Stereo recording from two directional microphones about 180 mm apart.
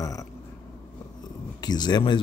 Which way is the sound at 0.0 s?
20° left (ahead or behind).